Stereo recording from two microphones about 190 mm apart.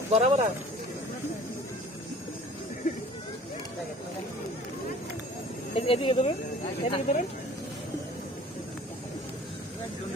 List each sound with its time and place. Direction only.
0.1 s speech: 35° right (ahead or behind)
5.7 s speech: 30° left (ahead or behind)